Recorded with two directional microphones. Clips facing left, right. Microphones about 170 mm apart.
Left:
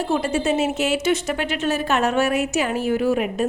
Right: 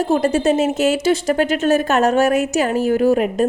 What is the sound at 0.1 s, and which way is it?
Speech, 40° right (ahead or behind).